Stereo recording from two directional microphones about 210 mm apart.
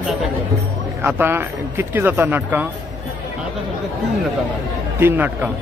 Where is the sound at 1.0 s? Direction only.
10° right (ahead or behind).